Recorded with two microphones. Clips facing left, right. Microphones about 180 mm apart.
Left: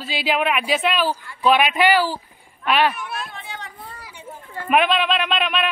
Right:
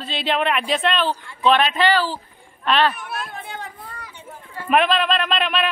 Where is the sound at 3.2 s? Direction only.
50° right (ahead or behind).